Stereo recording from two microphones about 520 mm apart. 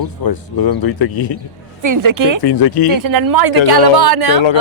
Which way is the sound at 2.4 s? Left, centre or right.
Left.